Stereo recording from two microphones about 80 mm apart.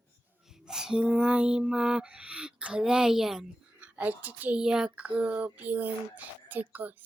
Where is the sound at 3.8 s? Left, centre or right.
Centre.